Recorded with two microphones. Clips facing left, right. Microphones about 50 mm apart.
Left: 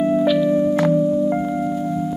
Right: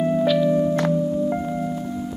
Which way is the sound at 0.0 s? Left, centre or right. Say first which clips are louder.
Left 2 dB; centre.